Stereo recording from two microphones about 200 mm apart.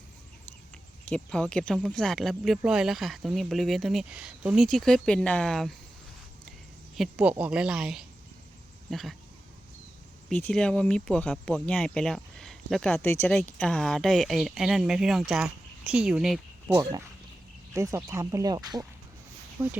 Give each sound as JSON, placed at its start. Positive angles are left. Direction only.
{"t": 1.0, "sound": "speech", "side_deg": 5}
{"t": 6.9, "sound": "speech", "side_deg": -5}
{"t": 10.5, "sound": "speech", "side_deg": 5}
{"t": 17.7, "sound": "speech", "side_deg": -15}